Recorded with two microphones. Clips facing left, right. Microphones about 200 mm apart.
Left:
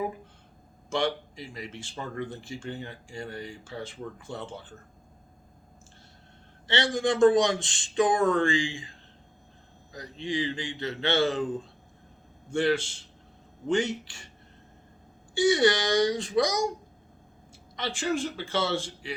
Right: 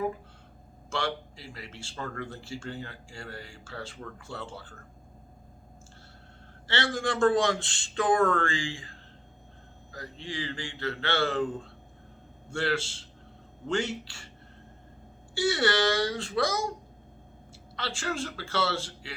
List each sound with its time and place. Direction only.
0.9 s speech: 15° left (ahead or behind)
6.7 s speech: 20° left (ahead or behind)
15.4 s speech: 15° left (ahead or behind)
17.7 s speech: 15° left (ahead or behind)